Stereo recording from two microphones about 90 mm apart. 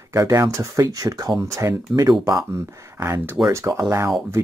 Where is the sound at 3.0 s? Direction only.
30° right (ahead or behind).